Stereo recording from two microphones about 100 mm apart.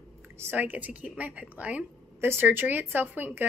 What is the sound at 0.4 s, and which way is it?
Speech, 20° right (ahead or behind).